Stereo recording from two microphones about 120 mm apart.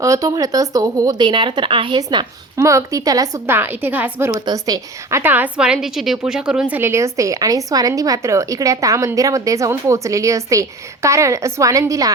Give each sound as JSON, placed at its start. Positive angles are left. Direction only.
{"t": 0.0, "sound": "speech", "side_deg": -25}
{"t": 2.6, "sound": "a woman's voice", "side_deg": -25}
{"t": 3.4, "sound": "a woman's voice", "side_deg": -20}
{"t": 4.3, "sound": "a woman's voice", "side_deg": -30}
{"t": 5.2, "sound": "a woman's voice", "side_deg": -15}
{"t": 6.7, "sound": "a woman's voice", "side_deg": -20}